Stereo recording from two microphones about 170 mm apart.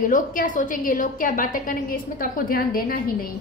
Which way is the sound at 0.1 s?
50° left (ahead or behind).